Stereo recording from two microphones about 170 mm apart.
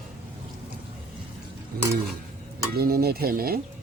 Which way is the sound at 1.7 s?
65° right (ahead or behind).